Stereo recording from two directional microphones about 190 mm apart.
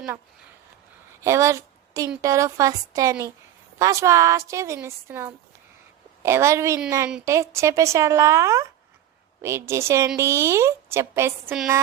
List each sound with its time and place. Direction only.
1.2 s a woman's voice: 15° right (ahead or behind)